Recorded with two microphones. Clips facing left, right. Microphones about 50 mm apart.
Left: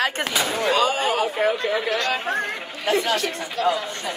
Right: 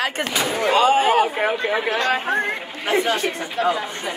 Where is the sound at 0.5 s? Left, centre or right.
Right.